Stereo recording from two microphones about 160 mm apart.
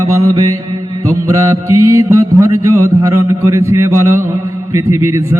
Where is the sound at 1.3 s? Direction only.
20° right (ahead or behind).